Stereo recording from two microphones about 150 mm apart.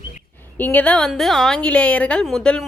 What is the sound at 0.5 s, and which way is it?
A woman's voice, 10° left (ahead or behind).